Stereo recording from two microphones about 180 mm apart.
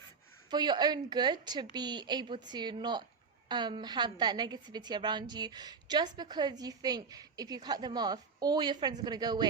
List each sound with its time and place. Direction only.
0.5 s a woman's voice: 25° right (ahead or behind)